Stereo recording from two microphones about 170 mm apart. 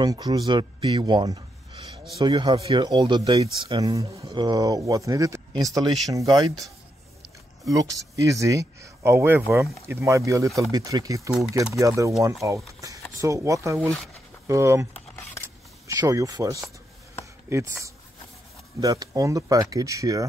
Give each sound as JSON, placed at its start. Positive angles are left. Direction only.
{"t": 0.0, "sound": "speech", "side_deg": -25}
{"t": 7.7, "sound": "speech", "side_deg": -20}
{"t": 15.4, "sound": "a sound", "side_deg": -20}
{"t": 17.5, "sound": "speech", "side_deg": -15}